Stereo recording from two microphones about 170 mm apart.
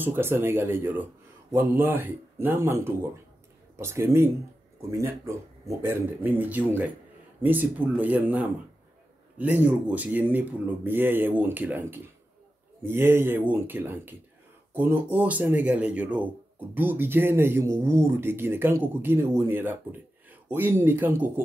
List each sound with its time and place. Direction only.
0.0 s speech: 15° right (ahead or behind)
9.6 s speech: 10° right (ahead or behind)